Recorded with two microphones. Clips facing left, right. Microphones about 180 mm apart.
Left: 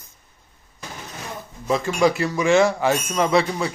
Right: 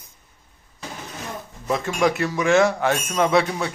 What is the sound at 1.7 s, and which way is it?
Speech, centre (ahead or behind).